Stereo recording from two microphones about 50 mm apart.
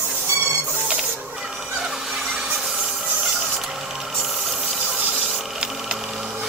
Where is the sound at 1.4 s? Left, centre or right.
Centre.